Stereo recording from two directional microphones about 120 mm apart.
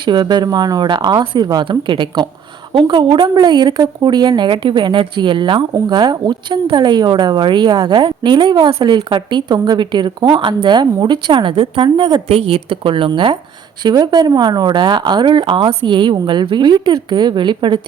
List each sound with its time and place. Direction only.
0.0 s a woman's voice: 40° right (ahead or behind)
12.3 s a woman's voice: 50° right (ahead or behind)